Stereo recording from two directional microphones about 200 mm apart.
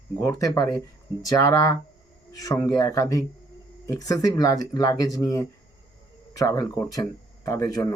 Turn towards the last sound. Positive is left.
turn(degrees=20)  # may be behind; listen again after turning